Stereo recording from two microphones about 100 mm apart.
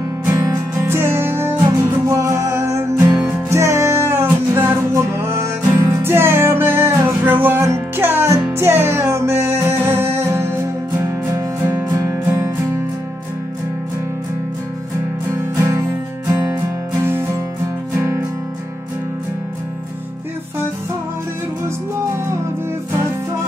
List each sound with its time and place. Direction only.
0.3 s music: 35° right (ahead or behind)
0.8 s music: 25° right (ahead or behind)
15.5 s music: 25° right (ahead or behind)